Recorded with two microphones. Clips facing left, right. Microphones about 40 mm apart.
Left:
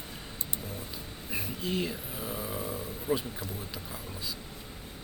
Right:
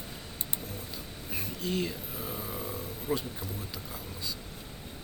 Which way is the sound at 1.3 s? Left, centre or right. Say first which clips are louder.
Left 1 dB; centre.